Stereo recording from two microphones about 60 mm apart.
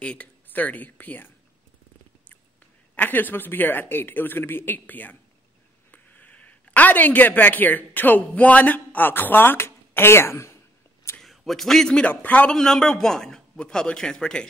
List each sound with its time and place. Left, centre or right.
0.0 s speech: centre
3.0 s speech: left
11.2 s a man's voice: centre
12.1 s speech: left
12.4 s a man's voice: centre